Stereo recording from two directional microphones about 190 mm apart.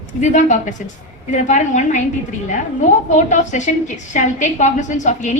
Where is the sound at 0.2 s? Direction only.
40° left (ahead or behind).